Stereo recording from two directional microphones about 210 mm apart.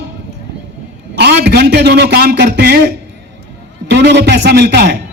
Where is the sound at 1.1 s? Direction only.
50° right (ahead or behind).